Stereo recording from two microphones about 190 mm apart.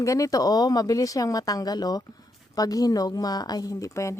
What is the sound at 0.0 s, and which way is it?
Speech, 15° left (ahead or behind).